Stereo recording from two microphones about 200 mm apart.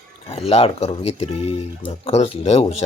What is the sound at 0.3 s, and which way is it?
Speech, 30° left (ahead or behind).